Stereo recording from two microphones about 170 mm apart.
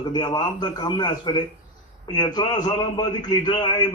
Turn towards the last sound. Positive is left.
turn(degrees=25)  # may be behind; listen again after turning